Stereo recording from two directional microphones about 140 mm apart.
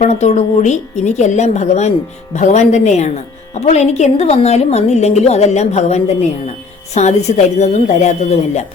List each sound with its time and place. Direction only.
0.0 s speech: 50° left (ahead or behind)